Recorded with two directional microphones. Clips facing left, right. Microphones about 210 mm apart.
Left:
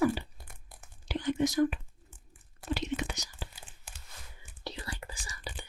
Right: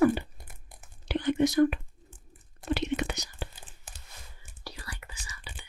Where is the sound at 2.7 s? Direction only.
65° right (ahead or behind).